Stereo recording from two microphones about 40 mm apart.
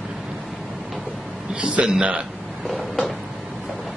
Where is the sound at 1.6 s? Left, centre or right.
Right.